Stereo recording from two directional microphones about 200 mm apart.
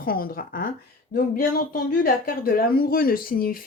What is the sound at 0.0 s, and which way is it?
Speech, 45° left (ahead or behind).